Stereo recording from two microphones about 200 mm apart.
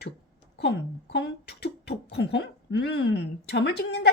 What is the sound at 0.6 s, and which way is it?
Speech, 55° left (ahead or behind).